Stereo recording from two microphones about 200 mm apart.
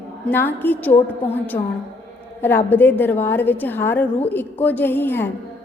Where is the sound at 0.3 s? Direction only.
10° left (ahead or behind).